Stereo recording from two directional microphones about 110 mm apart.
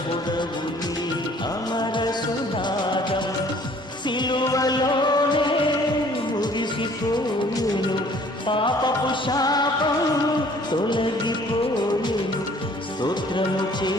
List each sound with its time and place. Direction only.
1.7 s music: 40° left (ahead or behind)
4.2 s music: 45° left (ahead or behind)
8.4 s music: 50° left (ahead or behind)
13.0 s music: 45° left (ahead or behind)